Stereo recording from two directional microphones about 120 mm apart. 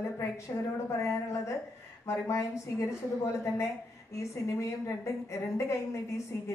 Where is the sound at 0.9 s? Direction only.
25° left (ahead or behind).